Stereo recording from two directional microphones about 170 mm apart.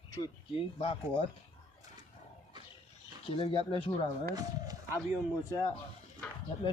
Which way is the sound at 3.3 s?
30° left (ahead or behind).